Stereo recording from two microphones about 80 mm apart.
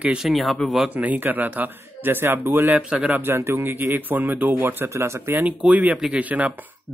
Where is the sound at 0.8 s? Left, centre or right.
Centre.